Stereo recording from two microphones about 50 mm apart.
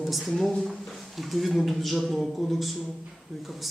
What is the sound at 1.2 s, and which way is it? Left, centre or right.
Speech, centre.